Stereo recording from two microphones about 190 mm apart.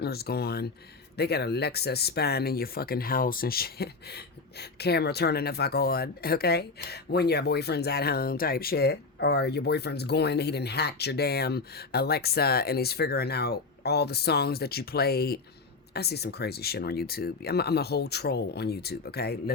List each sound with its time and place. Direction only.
0.0 s speech: 55° left (ahead or behind)